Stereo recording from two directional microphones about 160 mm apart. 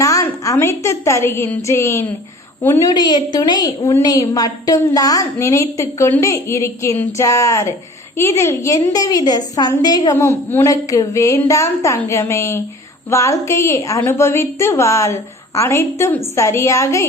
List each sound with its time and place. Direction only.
0.0 s a woman's voice: 20° left (ahead or behind)